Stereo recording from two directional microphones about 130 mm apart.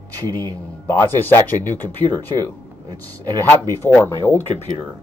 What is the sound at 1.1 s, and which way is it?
Speech, 15° left (ahead or behind).